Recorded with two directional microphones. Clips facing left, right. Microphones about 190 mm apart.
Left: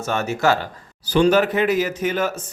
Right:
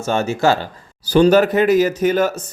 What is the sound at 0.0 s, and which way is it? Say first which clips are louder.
A man's voice: right 3 dB; 30° right (ahead or behind).